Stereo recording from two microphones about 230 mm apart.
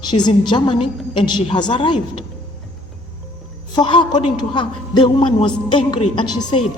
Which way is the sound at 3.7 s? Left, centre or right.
Centre.